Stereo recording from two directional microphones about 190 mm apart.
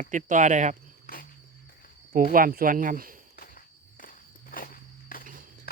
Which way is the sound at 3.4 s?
45° left (ahead or behind).